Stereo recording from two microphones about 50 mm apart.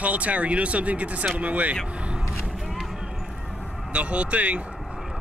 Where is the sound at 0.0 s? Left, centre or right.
Right.